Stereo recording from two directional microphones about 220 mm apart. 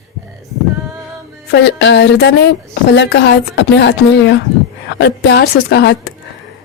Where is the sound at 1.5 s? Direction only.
50° left (ahead or behind).